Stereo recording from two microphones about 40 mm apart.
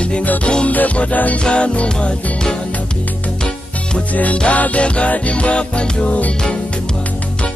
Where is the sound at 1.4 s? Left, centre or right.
Left.